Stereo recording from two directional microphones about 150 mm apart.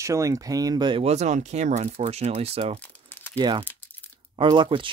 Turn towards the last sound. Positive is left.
turn(degrees=-35)  # may be behind; listen again after turning